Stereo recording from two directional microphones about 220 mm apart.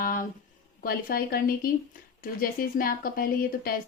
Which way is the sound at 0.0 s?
40° left (ahead or behind).